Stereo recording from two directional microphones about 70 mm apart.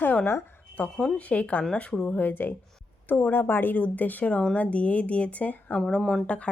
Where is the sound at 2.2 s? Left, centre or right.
Left.